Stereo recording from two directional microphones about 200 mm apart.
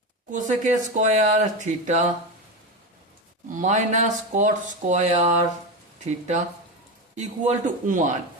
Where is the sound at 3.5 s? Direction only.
40° right (ahead or behind).